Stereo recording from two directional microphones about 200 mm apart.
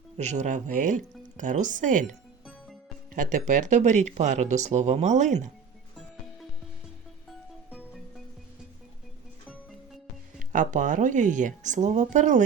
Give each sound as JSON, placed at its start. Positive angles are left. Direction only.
{"t": 0.2, "sound": "speech", "side_deg": -35}
{"t": 3.2, "sound": "speech", "side_deg": -40}
{"t": 7.3, "sound": "music", "side_deg": -5}
{"t": 10.5, "sound": "speech", "side_deg": -40}